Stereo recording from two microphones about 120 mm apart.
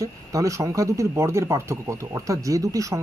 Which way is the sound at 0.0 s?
25° right (ahead or behind).